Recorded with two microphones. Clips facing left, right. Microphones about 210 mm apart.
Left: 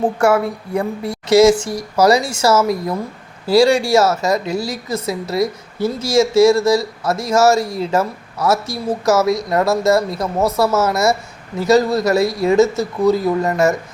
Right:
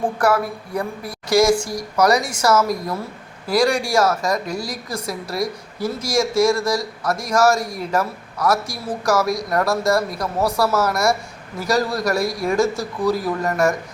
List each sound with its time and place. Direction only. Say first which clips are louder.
0.0 s speech: left 4 dB; 25° left (ahead or behind)